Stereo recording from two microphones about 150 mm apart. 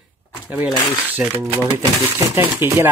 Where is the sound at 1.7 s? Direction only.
15° right (ahead or behind).